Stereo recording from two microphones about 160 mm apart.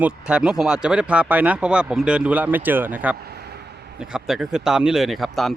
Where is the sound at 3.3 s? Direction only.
85° right.